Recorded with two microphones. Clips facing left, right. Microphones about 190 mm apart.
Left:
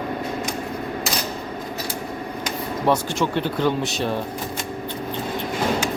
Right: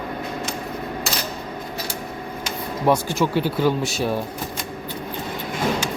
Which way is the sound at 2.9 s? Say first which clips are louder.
Right 2 dB; 10° right (ahead or behind).